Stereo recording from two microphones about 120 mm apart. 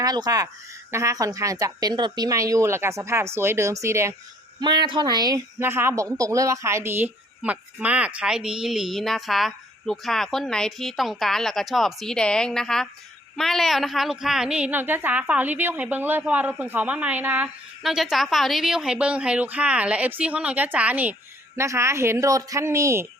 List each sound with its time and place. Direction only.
0.0 s a woman's voice: 30° right (ahead or behind)
4.6 s a woman's voice: 40° right (ahead or behind); by 17.5 s 15° right (ahead or behind)
17.8 s a woman's voice: centre (ahead or behind); by 23.0 s 25° right (ahead or behind)